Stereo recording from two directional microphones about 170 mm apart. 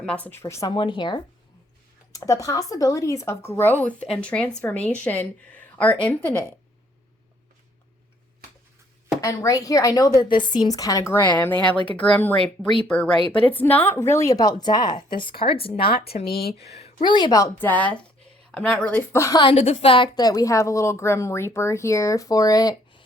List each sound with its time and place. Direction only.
0.0 s speech: 10° left (ahead or behind)
0.7 s a woman's voice: 25° left (ahead or behind); by 6.3 s 10° left (ahead or behind)
9.2 s a woman's voice: 20° left (ahead or behind)
12.4 s a woman's voice: 30° left (ahead or behind)
13.5 s a woman's voice: 10° left (ahead or behind); by 16.2 s 40° left (ahead or behind)
16.2 s speech: 65° left (ahead or behind)
16.6 s a woman's voice: 35° left (ahead or behind); by 19.4 s 15° left (ahead or behind)
19.4 s a woman's voice: 30° left (ahead or behind)